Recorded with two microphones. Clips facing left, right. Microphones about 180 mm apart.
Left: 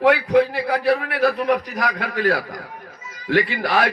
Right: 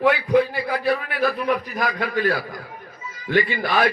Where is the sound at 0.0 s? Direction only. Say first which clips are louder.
Left 2 dB; 70° left (ahead or behind).